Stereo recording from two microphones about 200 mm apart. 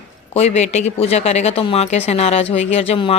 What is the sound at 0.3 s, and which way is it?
Speech, 35° left (ahead or behind).